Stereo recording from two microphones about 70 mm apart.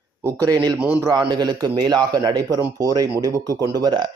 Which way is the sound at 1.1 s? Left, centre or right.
Right.